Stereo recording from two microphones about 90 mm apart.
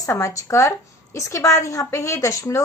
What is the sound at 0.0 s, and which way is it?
A woman's voice, 35° left (ahead or behind).